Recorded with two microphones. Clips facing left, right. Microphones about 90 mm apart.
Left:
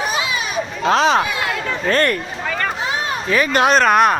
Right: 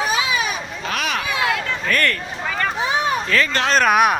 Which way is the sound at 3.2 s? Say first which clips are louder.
Left 4 dB; 15° left (ahead or behind).